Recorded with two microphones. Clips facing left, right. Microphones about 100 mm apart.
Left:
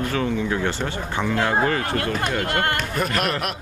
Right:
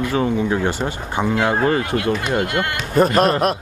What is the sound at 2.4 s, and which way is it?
Speech, 45° left (ahead or behind).